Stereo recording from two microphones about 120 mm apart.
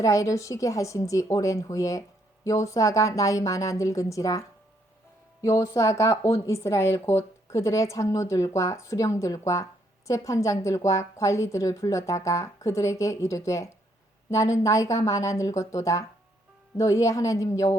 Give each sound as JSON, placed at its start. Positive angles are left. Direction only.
{"t": 0.0, "sound": "speech", "side_deg": 25}